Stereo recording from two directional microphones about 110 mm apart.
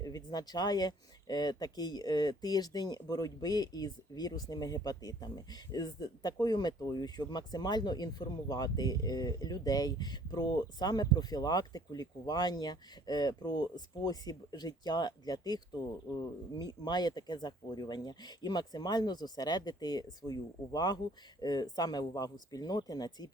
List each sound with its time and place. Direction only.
0.0 s speech: 40° left (ahead or behind)